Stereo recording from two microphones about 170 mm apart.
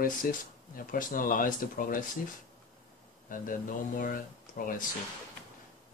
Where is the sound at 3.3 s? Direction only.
55° left (ahead or behind).